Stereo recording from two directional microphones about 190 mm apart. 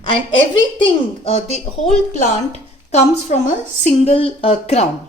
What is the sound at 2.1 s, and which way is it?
A woman's voice, 35° left (ahead or behind).